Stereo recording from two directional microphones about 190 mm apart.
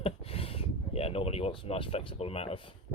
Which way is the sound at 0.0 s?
30° left (ahead or behind).